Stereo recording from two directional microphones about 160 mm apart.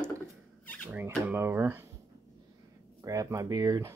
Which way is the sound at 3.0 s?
20° right (ahead or behind).